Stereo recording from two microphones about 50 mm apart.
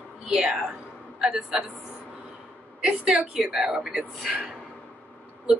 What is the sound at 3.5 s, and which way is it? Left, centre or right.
Speech, centre.